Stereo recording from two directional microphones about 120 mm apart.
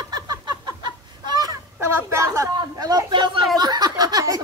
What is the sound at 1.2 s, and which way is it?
Honk, 35° right (ahead or behind).